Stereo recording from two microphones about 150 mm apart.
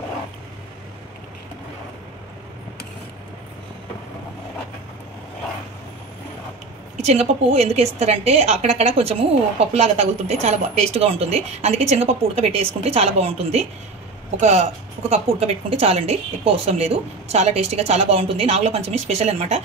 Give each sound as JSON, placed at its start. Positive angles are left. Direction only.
{"t": 7.0, "sound": "a woman's voice", "side_deg": -45}